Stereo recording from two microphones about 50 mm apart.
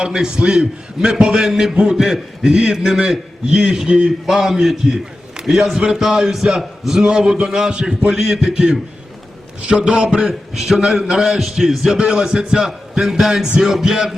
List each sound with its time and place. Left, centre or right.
0.0 s a man's voice: centre
11.9 s a man's voice: centre